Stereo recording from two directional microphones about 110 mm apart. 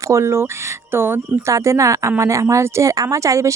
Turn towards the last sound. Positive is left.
turn(degrees=-30)  # may be behind; listen again after turning